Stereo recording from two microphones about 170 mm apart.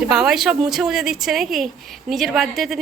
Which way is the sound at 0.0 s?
5° right (ahead or behind).